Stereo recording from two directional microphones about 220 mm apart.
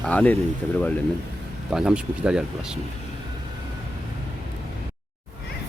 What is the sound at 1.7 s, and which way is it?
Speech, 5° right (ahead or behind).